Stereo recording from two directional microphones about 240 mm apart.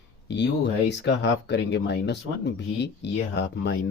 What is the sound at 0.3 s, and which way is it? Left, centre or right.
Speech, left.